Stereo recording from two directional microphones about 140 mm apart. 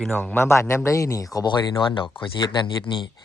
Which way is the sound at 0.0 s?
10° left (ahead or behind).